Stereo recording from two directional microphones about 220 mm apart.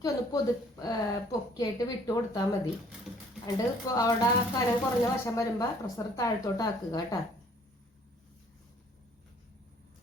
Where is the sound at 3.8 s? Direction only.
15° left (ahead or behind).